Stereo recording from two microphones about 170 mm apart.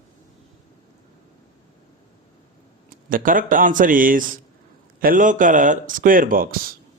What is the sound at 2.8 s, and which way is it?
A man's voice, 55° right (ahead or behind).